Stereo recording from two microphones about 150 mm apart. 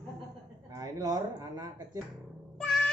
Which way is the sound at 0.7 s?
25° right (ahead or behind).